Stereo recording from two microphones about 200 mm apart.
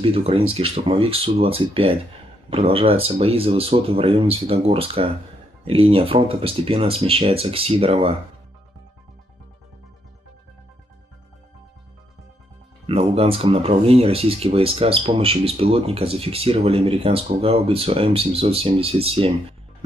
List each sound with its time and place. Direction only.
0.0 s speech: 30° right (ahead or behind)
12.8 s speech: 30° right (ahead or behind)